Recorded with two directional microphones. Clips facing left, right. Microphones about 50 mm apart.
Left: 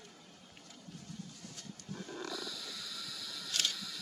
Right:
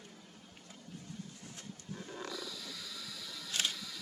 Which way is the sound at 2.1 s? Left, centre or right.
Centre.